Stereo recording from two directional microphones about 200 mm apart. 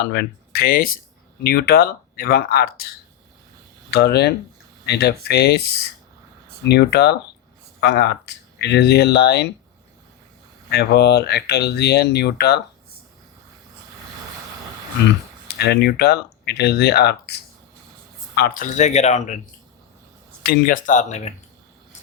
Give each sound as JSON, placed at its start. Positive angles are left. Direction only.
{"t": 0.0, "sound": "speech", "side_deg": 55}
{"t": 3.9, "sound": "speech", "side_deg": 55}
{"t": 10.7, "sound": "speech", "side_deg": 55}
{"t": 15.4, "sound": "speech", "side_deg": 55}
{"t": 18.3, "sound": "speech", "side_deg": 45}
{"t": 20.4, "sound": "speech", "side_deg": 45}